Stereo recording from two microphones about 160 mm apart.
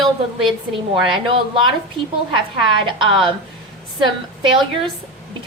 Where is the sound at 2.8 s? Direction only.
30° right (ahead or behind).